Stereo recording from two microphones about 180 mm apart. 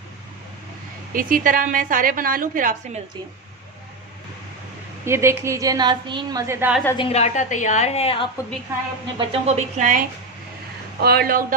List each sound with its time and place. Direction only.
1.1 s a woman's voice: 50° right (ahead or behind)
5.0 s a woman's voice: 15° right (ahead or behind)
6.9 s a woman's voice: 30° left (ahead or behind)
9.1 s speech: 35° right (ahead or behind)
11.0 s speech: 60° right (ahead or behind)